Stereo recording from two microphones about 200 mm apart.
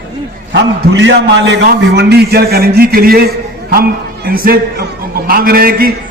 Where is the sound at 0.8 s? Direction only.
65° right (ahead or behind).